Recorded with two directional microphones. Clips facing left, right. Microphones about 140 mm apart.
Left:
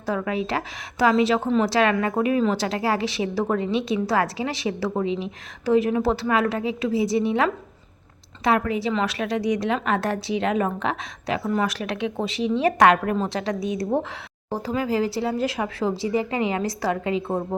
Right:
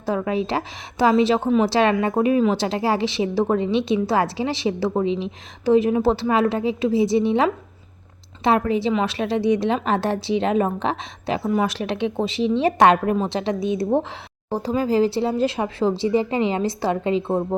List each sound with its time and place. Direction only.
0.0 s a woman's voice: 25° right (ahead or behind)